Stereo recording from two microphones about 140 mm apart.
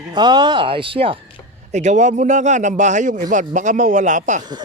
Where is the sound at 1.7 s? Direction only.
55° right (ahead or behind).